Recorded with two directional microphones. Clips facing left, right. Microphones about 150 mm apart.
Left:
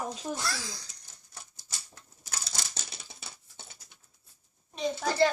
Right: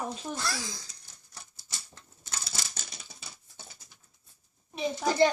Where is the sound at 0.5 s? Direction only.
20° right (ahead or behind).